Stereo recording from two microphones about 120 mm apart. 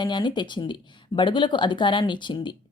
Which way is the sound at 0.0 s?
40° left (ahead or behind).